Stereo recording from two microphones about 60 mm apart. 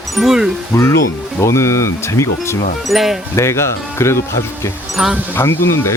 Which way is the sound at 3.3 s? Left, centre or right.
Left.